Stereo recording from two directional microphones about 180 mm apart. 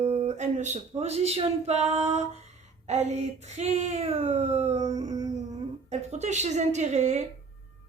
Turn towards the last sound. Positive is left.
turn(degrees=-40)  # may be behind; listen again after turning